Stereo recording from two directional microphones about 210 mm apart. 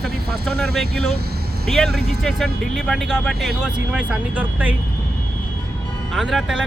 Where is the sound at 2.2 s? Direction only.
Centre (ahead or behind).